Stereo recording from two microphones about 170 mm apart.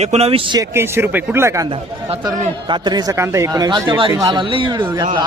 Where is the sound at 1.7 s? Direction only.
30° right (ahead or behind).